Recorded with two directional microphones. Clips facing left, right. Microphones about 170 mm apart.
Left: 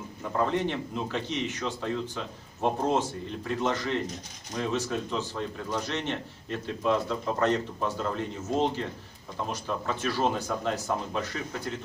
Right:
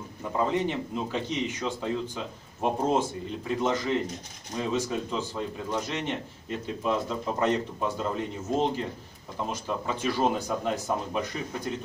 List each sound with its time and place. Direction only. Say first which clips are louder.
0.4 s a man's voice: right 1 dB; 10° right (ahead or behind)